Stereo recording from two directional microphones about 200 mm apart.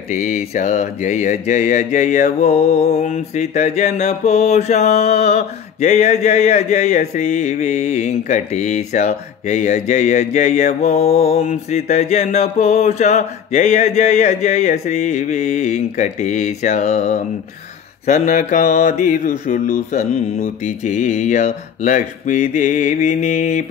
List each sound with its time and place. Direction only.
0.1 s mantra: 35° left (ahead or behind)
11.2 s mantra: 30° left (ahead or behind)